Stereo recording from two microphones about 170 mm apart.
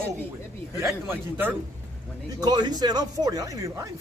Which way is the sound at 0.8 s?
15° right (ahead or behind).